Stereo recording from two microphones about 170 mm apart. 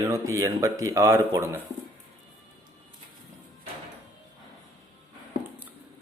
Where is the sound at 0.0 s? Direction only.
20° right (ahead or behind).